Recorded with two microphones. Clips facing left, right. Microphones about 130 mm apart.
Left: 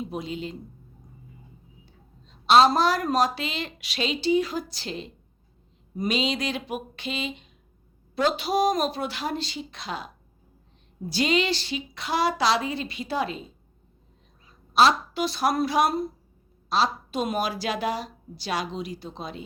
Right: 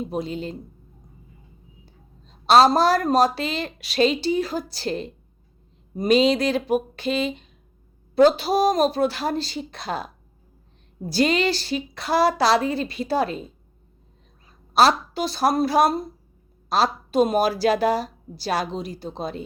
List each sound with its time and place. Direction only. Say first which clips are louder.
0.0 s speech: right 4 dB; 40° right (ahead or behind)
2.2 s speech: right 2 dB; 40° right (ahead or behind)
11.1 s a woman's voice: right 4 dB; 45° right (ahead or behind)
14.7 s a woman's voice: right 2 dB; 40° right (ahead or behind)